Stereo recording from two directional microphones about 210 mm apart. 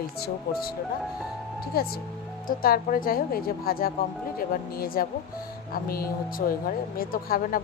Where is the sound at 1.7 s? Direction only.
45° left (ahead or behind).